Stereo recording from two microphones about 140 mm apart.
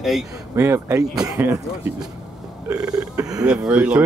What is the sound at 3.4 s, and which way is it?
Speech, 5° right (ahead or behind).